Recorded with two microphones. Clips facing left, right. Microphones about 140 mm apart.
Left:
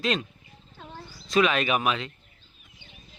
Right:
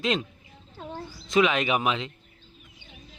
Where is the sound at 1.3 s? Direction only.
20° right (ahead or behind).